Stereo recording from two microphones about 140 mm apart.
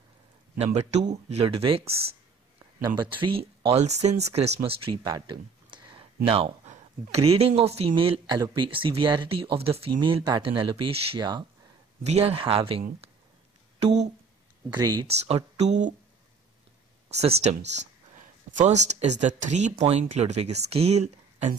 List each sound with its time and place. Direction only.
0.6 s speech: 50° right (ahead or behind)
3.0 s speech: 35° right (ahead or behind)
5.1 s a sound: 35° right (ahead or behind)
6.2 s speech: 40° right (ahead or behind)
12.0 s speech: 50° right (ahead or behind)
14.7 s speech: 30° right (ahead or behind)
15.0 s speech: 50° right (ahead or behind)
17.1 s speech: 50° right (ahead or behind)